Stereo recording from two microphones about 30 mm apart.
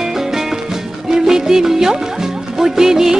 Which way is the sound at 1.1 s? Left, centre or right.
Centre.